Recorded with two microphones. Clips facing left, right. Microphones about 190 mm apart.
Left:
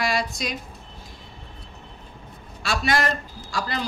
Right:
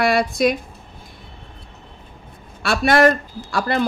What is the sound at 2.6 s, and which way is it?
A woman's voice, 60° right (ahead or behind).